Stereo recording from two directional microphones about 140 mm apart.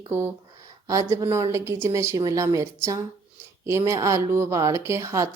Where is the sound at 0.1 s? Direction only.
15° right (ahead or behind).